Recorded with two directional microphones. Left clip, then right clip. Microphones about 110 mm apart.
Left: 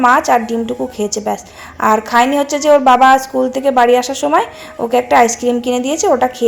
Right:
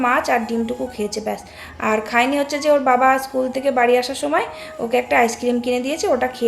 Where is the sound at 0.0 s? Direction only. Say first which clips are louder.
Left 7 dB; 45° left (ahead or behind).